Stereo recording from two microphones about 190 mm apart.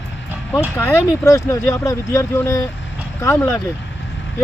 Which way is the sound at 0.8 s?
10° left (ahead or behind).